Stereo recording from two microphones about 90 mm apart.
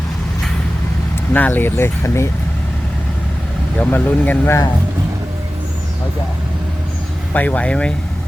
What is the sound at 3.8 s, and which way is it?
Speech, 20° left (ahead or behind).